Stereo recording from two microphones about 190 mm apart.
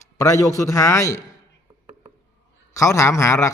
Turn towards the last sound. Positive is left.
turn(degrees=15)  # may be behind; listen again after turning